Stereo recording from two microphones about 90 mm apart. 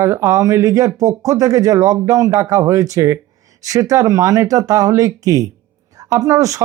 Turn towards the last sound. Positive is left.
turn(degrees=-35)  # may be behind; listen again after turning